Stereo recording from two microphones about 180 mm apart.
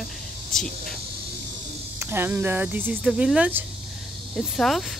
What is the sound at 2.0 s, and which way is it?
Speech, 10° right (ahead or behind).